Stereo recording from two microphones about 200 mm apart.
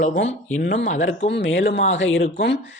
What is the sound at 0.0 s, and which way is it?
Speech, 35° left (ahead or behind).